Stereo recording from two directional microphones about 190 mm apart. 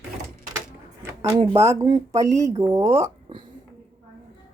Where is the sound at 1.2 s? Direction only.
30° right (ahead or behind).